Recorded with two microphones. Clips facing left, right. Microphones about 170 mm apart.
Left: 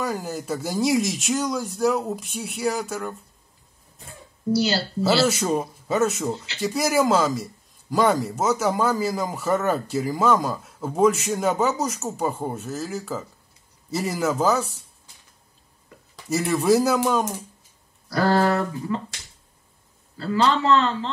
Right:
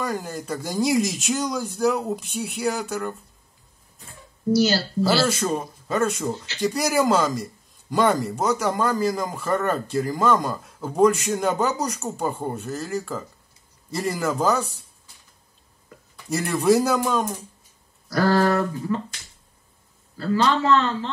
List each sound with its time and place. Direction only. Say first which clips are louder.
0.0 s a man's voice: left 1 dB; 5° left (ahead or behind)
5.0 s a man's voice: left 2 dB; 5° left (ahead or behind)
16.3 s a man's voice: even; centre (ahead or behind)
18.1 s a man's voice: even; 30° left (ahead or behind)
20.2 s a man's voice: even; 25° left (ahead or behind)